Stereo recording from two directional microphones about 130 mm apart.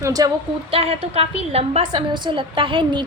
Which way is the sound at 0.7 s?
50° right (ahead or behind).